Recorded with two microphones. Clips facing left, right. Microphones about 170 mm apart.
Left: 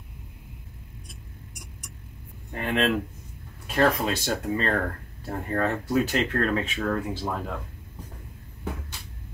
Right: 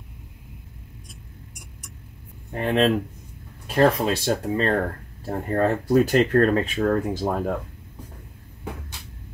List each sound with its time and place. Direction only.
2.5 s speech: 30° right (ahead or behind)
3.6 s a sound: 30° right (ahead or behind)
4.0 s speech: 30° right (ahead or behind)